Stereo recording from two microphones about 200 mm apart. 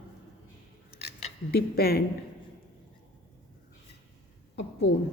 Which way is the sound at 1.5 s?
50° left (ahead or behind).